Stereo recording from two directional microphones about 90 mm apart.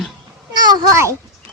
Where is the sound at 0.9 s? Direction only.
30° right (ahead or behind).